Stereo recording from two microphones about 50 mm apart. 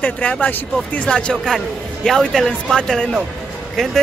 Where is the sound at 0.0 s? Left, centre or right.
Left.